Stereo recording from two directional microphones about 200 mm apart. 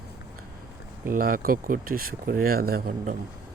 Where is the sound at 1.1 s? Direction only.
45° right (ahead or behind).